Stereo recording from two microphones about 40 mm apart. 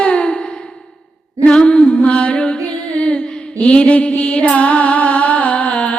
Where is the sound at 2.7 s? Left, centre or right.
Left.